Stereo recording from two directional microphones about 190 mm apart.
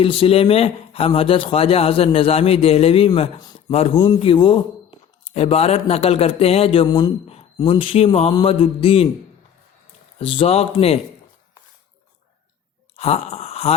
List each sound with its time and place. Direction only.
0.0 s a man's voice: 30° left (ahead or behind)
3.7 s a man's voice: 30° left (ahead or behind)
10.2 s a man's voice: 30° left (ahead or behind)
13.0 s speech: 35° left (ahead or behind)